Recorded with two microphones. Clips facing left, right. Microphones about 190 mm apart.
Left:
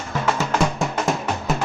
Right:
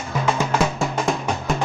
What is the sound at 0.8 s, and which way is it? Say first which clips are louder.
Music: even; centre (ahead or behind).